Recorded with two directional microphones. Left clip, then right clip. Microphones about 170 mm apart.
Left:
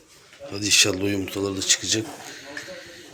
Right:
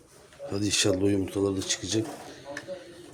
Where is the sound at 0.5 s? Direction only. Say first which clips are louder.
Left 6 dB; 30° right (ahead or behind); by 2.9 s 15° right (ahead or behind).